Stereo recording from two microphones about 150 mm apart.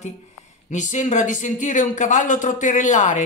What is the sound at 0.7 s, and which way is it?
Speech, 55° left (ahead or behind).